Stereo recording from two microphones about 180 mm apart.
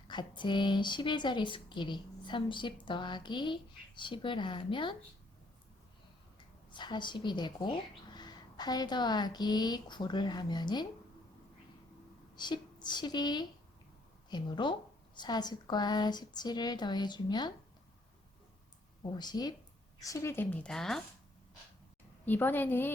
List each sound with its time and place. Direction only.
0.1 s speech: 25° left (ahead or behind)
6.7 s speech: 25° left (ahead or behind)
12.4 s speech: 25° left (ahead or behind)
19.1 s a woman's voice: 25° left (ahead or behind); by 21.0 s centre (ahead or behind)
22.3 s a woman's voice: 10° left (ahead or behind)